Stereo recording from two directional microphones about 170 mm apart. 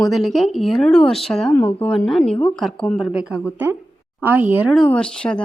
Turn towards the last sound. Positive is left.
turn(degrees=5)  # may be behind; listen again after turning